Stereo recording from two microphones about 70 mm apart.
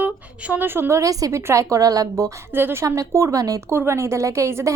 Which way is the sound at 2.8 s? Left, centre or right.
Right.